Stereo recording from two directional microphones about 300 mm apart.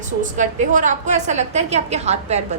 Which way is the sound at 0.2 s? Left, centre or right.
Right.